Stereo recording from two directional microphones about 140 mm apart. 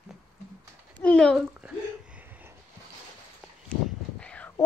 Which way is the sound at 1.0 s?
10° left (ahead or behind).